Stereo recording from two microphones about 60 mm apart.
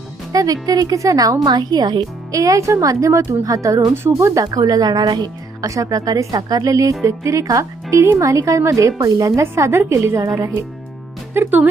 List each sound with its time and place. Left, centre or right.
0.3 s a woman's voice: right
2.0 s a woman's voice: right
4.4 s a woman's voice: right
7.0 s speech: right
9.4 s a woman's voice: right
11.3 s speech: right